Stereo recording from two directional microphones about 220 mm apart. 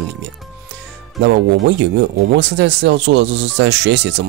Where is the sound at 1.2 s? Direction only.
50° right (ahead or behind).